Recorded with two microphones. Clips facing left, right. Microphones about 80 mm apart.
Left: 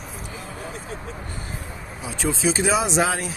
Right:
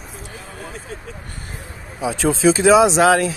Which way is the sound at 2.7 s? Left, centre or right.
Right.